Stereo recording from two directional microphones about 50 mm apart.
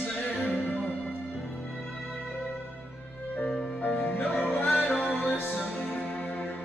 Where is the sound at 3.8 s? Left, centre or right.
Left.